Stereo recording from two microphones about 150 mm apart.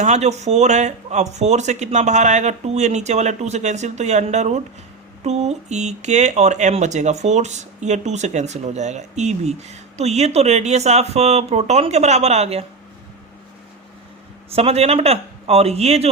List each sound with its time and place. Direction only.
0.0 s speech: 50° right (ahead or behind)
14.5 s speech: 45° right (ahead or behind)